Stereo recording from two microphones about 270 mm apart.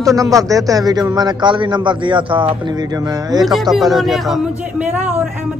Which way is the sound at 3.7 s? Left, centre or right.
Centre.